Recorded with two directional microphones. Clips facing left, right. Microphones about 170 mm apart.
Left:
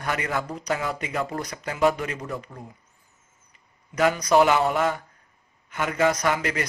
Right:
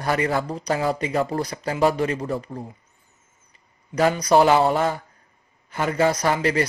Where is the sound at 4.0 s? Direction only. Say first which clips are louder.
Right 2 dB; 30° right (ahead or behind).